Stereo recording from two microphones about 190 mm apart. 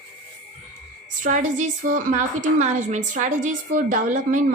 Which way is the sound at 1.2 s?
40° right (ahead or behind).